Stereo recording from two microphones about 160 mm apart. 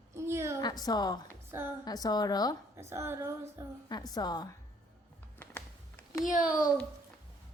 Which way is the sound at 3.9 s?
25° left (ahead or behind).